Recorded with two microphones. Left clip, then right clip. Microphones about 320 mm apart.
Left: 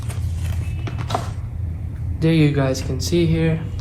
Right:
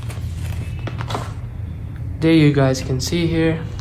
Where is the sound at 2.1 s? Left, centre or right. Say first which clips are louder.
Right 4 dB; right.